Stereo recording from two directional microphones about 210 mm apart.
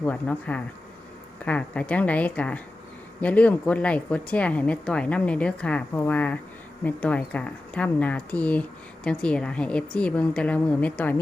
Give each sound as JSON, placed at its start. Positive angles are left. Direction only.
{"t": 0.0, "sound": "a woman's voice", "side_deg": 5}